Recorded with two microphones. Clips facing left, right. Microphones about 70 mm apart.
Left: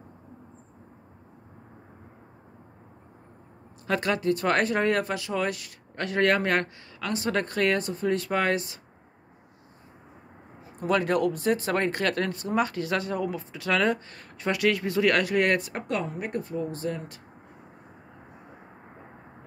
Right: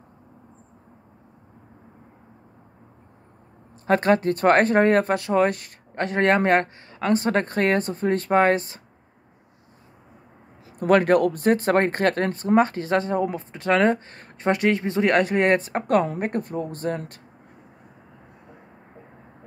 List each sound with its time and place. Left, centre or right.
3.8 s speech: right
10.8 s speech: right
16.2 s speech: right